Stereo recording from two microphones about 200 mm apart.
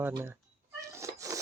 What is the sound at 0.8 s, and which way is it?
Cat, 15° right (ahead or behind).